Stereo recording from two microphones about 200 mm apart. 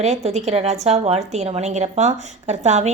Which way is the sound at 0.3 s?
35° right (ahead or behind).